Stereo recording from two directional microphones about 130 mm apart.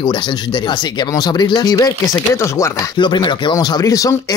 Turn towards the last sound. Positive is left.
turn(degrees=25)  # may be behind; listen again after turning